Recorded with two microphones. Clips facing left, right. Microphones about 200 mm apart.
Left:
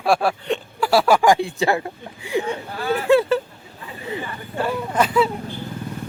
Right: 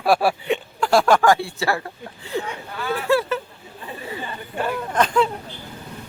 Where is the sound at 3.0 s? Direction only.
15° left (ahead or behind).